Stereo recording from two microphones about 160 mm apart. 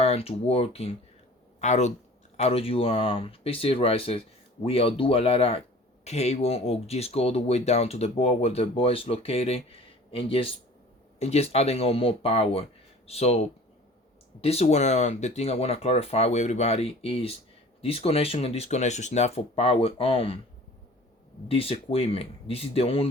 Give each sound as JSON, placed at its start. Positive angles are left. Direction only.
{"t": 0.0, "sound": "speech", "side_deg": 40}
{"t": 21.4, "sound": "speech", "side_deg": 35}